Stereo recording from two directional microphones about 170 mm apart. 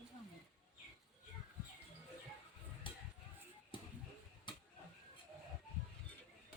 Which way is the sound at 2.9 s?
30° left (ahead or behind).